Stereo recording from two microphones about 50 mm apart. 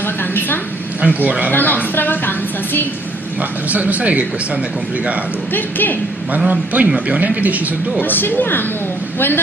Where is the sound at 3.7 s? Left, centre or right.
Right.